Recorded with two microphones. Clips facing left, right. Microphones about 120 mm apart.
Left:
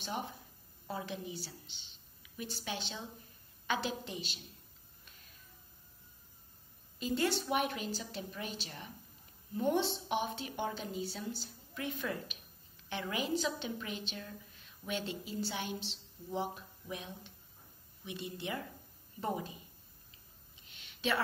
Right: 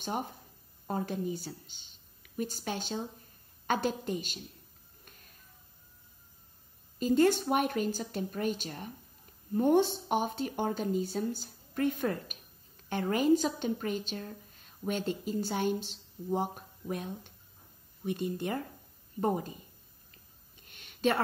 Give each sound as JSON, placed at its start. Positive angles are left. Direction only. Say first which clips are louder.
{"t": 0.0, "sound": "a woman's voice", "louder": "right 4 dB", "side_deg": -45}
{"t": 5.0, "sound": "music", "louder": "right 4 dB", "side_deg": -50}
{"t": 7.0, "sound": "a woman's voice", "louder": "right 8 dB", "side_deg": -45}
{"t": 20.6, "sound": "a sound", "louder": "right 7 dB", "side_deg": -50}